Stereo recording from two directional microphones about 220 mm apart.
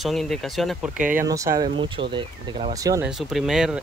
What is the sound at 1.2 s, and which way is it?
Speech, 15° right (ahead or behind).